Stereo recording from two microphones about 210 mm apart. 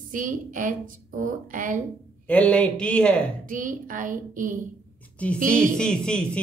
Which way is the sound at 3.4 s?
40° right (ahead or behind).